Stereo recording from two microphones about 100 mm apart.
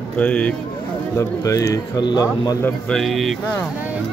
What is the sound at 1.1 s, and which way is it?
Speech, 30° left (ahead or behind).